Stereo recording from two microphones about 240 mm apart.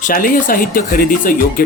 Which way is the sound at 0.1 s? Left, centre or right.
Left.